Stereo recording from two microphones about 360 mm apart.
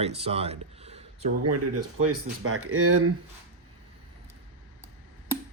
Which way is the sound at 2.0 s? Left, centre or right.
Right.